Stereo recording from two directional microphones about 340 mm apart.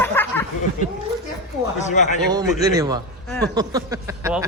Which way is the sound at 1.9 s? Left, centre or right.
Left.